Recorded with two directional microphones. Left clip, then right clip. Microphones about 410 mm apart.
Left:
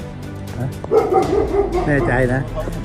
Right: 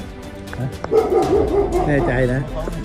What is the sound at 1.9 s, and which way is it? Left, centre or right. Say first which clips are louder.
Speech: left 1 dB; centre.